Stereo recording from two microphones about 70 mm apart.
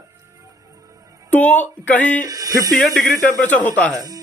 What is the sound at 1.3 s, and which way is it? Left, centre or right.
Speech, left.